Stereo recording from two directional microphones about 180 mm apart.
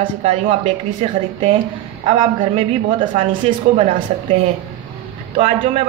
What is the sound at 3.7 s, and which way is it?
A man's voice, 40° right (ahead or behind).